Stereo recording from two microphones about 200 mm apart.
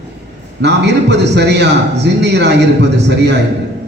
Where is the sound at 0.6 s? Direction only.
60° right (ahead or behind).